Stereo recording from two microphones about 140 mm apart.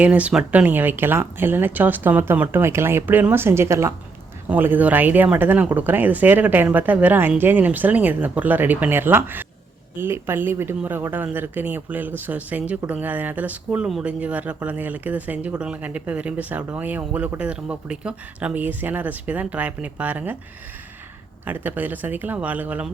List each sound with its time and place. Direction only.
0.0 s speech: 10° right (ahead or behind)
21.4 s speech: 10° right (ahead or behind)